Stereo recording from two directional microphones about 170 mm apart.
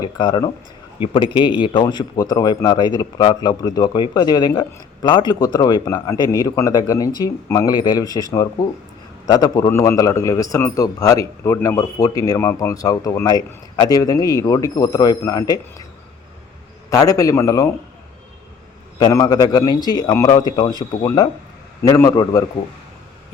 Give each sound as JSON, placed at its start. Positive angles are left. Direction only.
{"t": 0.0, "sound": "a man's voice", "side_deg": 25}
{"t": 16.9, "sound": "a man's voice", "side_deg": 20}
{"t": 18.9, "sound": "a man's voice", "side_deg": 25}